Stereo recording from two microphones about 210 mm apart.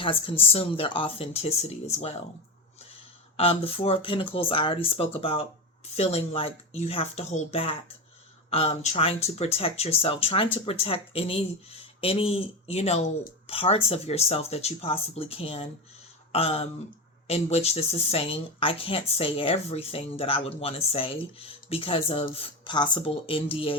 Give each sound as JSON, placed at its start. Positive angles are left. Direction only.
{"t": 0.0, "sound": "speech", "side_deg": 25}
{"t": 3.3, "sound": "speech", "side_deg": 30}